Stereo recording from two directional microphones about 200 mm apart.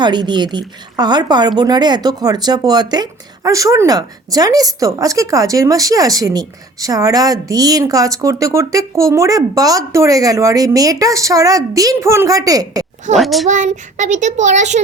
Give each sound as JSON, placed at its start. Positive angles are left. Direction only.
{"t": 0.0, "sound": "speech", "side_deg": -20}
{"t": 13.1, "sound": "a child's voice", "side_deg": 0}
{"t": 13.5, "sound": "speech", "side_deg": -35}